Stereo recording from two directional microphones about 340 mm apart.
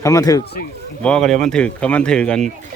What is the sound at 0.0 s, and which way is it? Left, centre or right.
Speech, centre.